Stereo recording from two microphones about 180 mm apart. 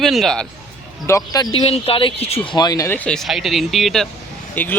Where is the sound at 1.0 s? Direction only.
15° left (ahead or behind).